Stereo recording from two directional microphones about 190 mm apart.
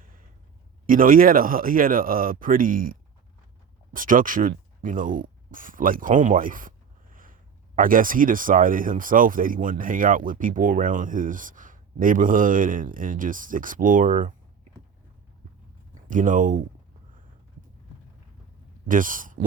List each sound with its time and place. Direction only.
0.0 s a sound: 50° right (ahead or behind)
0.9 s speech: 45° right (ahead or behind)
16.0 s speech: 45° right (ahead or behind)
18.9 s speech: 45° right (ahead or behind)